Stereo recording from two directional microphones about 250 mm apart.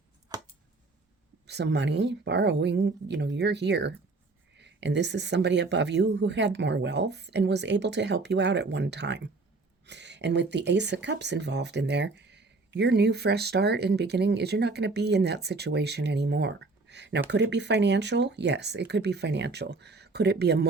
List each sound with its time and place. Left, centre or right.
1.5 s speech: right